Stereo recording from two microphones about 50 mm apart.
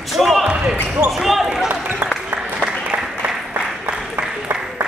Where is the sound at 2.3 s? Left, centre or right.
Right.